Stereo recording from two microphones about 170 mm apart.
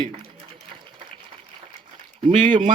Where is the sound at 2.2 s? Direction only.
30° right (ahead or behind).